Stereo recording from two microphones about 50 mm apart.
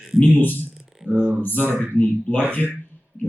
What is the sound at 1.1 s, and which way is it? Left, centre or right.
Speech, left.